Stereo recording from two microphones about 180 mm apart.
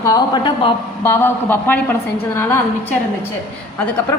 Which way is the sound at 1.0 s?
15° left (ahead or behind).